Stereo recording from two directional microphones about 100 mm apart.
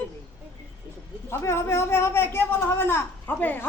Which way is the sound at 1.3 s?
25° left (ahead or behind).